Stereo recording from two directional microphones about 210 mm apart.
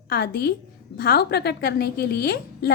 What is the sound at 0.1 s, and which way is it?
Speech, 50° left (ahead or behind).